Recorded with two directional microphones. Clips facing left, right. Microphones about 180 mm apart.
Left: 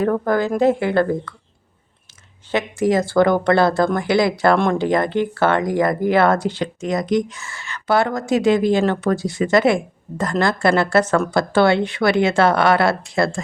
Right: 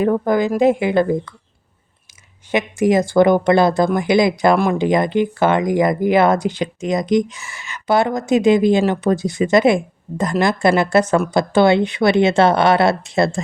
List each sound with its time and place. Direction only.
0.0 s speech: 15° right (ahead or behind)
2.5 s speech: 15° right (ahead or behind)
4.5 s speech: 5° right (ahead or behind)
4.8 s speech: 15° right (ahead or behind)